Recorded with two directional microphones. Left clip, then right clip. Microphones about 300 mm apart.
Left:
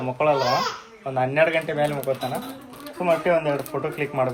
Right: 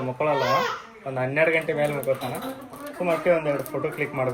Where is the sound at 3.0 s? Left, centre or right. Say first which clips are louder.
Left 2 dB; centre.